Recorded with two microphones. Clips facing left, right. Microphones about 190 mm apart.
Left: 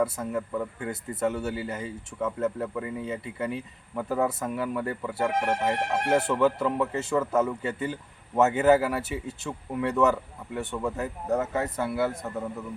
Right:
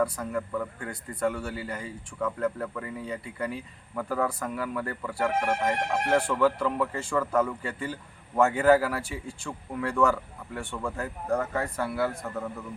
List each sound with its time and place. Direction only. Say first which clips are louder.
0.2 s speech: left 1 dB; 20° left (ahead or behind)